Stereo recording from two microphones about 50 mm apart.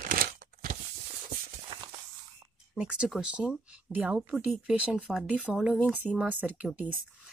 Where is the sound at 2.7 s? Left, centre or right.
Centre.